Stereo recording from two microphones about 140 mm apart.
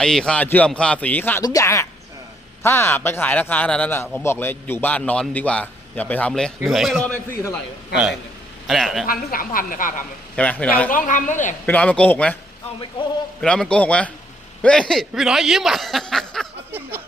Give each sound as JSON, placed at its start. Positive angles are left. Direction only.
{"t": 0.0, "sound": "a man's voice", "side_deg": 5}
{"t": 8.6, "sound": "speech", "side_deg": 0}
{"t": 9.0, "sound": "a woman's voice", "side_deg": 90}
{"t": 10.3, "sound": "a man's voice", "side_deg": 10}
{"t": 10.9, "sound": "a woman's voice", "side_deg": 65}
{"t": 11.6, "sound": "a man's voice", "side_deg": 10}
{"t": 13.4, "sound": "a man's voice", "side_deg": 5}